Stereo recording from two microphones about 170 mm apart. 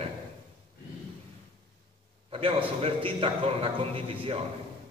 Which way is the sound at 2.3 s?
30° right (ahead or behind).